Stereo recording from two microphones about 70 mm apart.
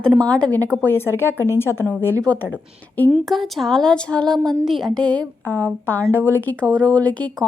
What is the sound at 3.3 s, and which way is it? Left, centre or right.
Speech, centre.